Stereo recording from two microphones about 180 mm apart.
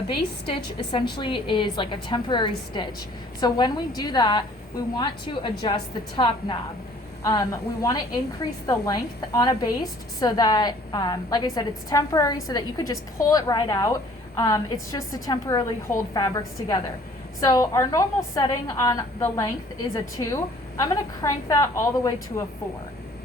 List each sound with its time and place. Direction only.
0.5 s a woman's voice: 25° left (ahead or behind)